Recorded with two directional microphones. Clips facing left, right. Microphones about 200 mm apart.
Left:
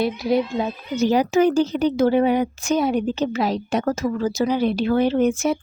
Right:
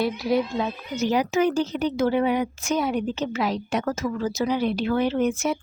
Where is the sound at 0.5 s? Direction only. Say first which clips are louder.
Left 3 dB; 30° left (ahead or behind).